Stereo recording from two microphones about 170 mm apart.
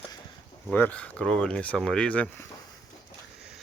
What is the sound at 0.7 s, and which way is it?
Speech, 10° left (ahead or behind).